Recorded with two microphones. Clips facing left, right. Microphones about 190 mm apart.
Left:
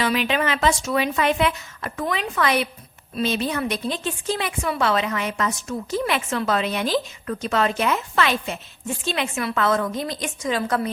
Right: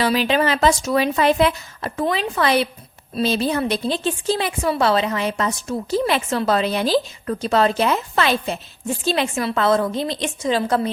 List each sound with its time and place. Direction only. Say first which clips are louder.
0.0 s speech: right 4 dB; 35° right (ahead or behind)